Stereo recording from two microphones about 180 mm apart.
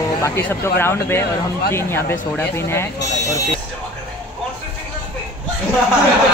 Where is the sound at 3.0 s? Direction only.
75° left (ahead or behind).